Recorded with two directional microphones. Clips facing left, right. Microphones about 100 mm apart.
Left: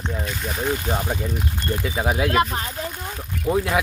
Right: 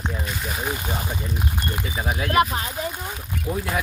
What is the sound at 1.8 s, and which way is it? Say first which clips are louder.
Speech: left 7 dB; 75° left (ahead or behind).